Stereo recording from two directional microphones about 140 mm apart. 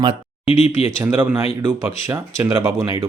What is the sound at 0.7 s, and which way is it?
Speech, 20° right (ahead or behind).